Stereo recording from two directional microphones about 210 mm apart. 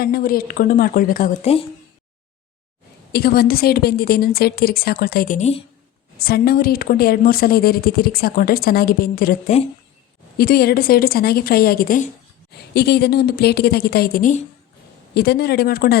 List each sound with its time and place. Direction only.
0.0 s a woman's voice: 45° left (ahead or behind)
3.1 s a woman's voice: 45° left (ahead or behind); by 5.6 s 30° left (ahead or behind)
6.1 s a woman's voice: 45° left (ahead or behind)
15.1 s a woman's voice: 50° left (ahead or behind)